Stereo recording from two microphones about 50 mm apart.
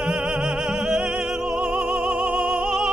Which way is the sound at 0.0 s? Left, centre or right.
Centre.